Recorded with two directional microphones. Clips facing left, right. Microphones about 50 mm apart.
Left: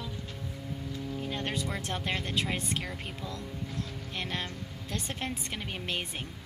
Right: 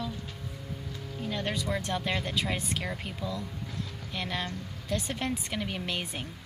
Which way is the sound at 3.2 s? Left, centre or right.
Centre.